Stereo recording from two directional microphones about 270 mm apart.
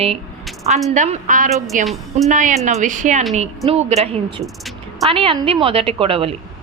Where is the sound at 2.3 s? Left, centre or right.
Right.